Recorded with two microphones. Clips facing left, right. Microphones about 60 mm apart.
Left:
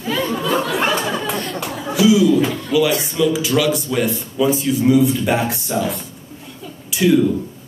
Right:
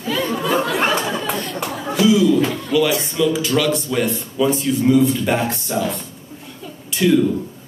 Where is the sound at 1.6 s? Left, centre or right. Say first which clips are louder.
Left 1 dB; centre.